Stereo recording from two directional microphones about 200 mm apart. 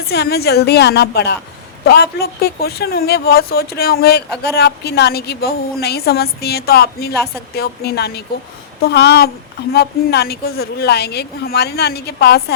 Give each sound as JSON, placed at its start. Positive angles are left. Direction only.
{"t": 0.0, "sound": "a woman's voice", "side_deg": 55}